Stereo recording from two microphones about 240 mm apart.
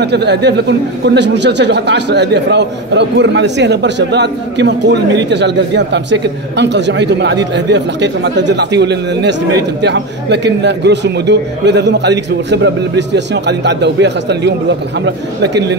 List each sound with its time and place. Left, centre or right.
0.0 s speech: right